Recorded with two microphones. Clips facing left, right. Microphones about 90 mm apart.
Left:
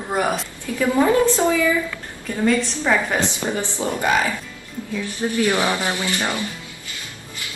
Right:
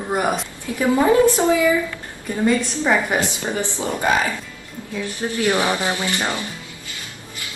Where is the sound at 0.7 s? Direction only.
20° right (ahead or behind).